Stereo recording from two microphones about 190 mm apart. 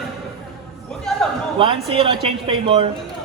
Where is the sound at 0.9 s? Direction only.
Centre (ahead or behind).